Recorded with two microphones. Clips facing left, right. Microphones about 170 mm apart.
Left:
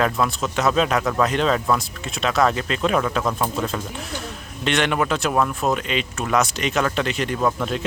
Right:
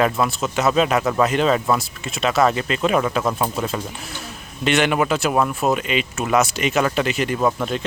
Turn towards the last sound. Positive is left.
turn(degrees=-5)  # may be behind; listen again after turning